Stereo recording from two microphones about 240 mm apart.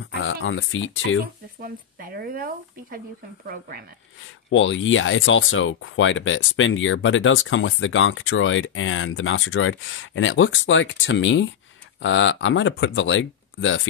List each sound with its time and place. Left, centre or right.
0.1 s speech: left
1.2 s speech: right
4.5 s speech: left